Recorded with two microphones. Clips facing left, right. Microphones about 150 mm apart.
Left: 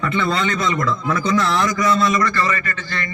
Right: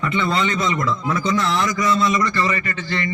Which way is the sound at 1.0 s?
25° right (ahead or behind).